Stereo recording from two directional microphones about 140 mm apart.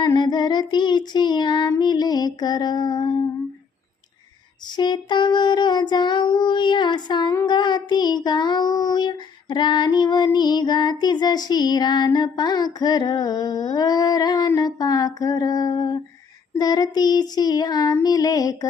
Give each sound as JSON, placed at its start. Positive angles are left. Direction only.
{"t": 0.0, "sound": "female singing", "side_deg": 30}
{"t": 4.8, "sound": "female singing", "side_deg": 35}
{"t": 16.6, "sound": "child singing", "side_deg": 30}